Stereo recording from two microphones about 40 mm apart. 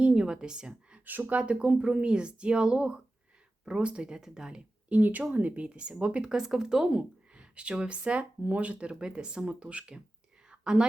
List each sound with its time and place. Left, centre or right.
0.0 s a woman's voice: right
1.0 s speech: right
1.4 s speech: right
4.9 s speech: right
5.6 s speech: right
10.5 s whispering: centre